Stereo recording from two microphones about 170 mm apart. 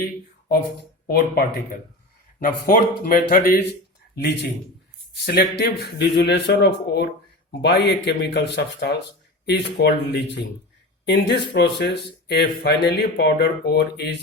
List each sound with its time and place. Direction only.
1.0 s speech: 60° left (ahead or behind)
5.2 s speech: 70° left (ahead or behind)